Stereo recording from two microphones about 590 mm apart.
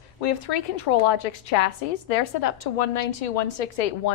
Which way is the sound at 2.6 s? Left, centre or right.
Left.